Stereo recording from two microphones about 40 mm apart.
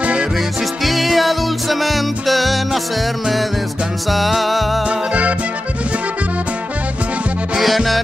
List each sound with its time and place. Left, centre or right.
0.8 s music: centre
4.1 s music: centre
4.8 s music: right
7.6 s music: centre